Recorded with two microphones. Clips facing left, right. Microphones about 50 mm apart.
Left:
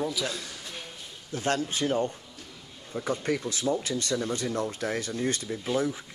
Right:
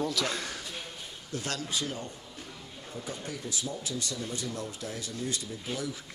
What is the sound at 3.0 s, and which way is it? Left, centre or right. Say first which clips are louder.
Speech: left 10 dB; left.